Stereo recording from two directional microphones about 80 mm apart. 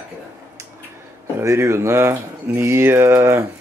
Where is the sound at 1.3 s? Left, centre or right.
Right.